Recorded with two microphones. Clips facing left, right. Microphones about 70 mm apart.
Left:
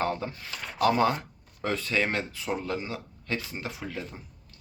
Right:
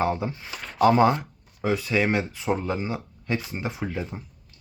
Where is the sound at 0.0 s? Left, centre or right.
Centre.